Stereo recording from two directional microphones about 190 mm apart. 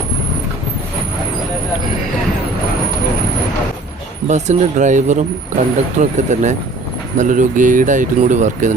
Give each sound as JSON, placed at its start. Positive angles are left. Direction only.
{"t": 4.3, "sound": "speech", "side_deg": -35}